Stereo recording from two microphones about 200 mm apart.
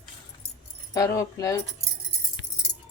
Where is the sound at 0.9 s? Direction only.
15° left (ahead or behind).